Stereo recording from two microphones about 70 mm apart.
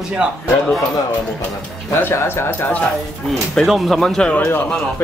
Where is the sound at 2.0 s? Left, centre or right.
Left.